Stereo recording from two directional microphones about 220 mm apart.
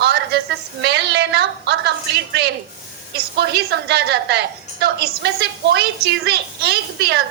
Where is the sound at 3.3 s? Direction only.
50° right (ahead or behind).